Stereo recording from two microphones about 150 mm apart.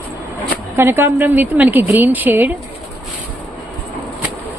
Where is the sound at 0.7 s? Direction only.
15° right (ahead or behind).